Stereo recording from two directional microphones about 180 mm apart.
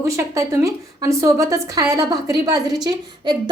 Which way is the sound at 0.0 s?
15° right (ahead or behind).